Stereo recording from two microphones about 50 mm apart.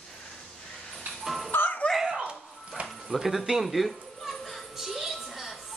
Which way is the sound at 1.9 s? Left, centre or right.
Centre.